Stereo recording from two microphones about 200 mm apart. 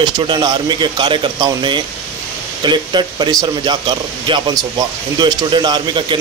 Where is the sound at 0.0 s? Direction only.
25° right (ahead or behind).